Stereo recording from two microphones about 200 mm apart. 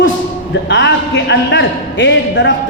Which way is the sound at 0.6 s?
60° left (ahead or behind).